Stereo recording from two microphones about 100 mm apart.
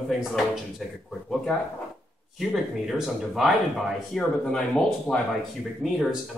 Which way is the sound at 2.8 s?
5° right (ahead or behind).